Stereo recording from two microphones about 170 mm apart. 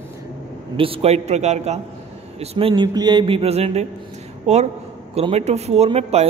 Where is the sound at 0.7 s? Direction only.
30° right (ahead or behind).